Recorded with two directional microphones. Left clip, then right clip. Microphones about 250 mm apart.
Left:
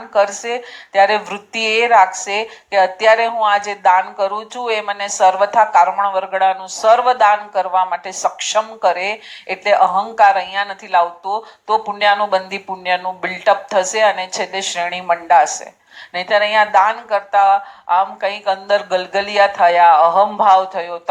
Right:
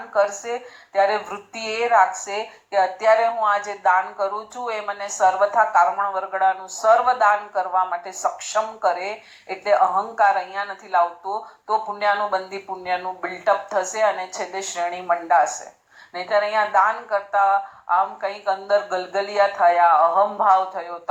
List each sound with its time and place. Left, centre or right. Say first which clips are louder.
0.4 s a woman's voice: left 6 dB; left
9.7 s speech: left 4 dB; left
10.2 s a woman's voice: left 8 dB; left